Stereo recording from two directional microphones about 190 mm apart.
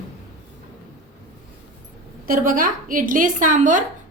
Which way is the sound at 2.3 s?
45° right (ahead or behind).